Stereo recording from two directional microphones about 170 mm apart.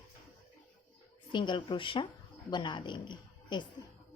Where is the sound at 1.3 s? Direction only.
30° left (ahead or behind).